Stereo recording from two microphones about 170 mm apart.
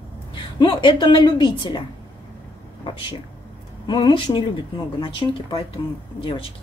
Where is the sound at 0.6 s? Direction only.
30° left (ahead or behind).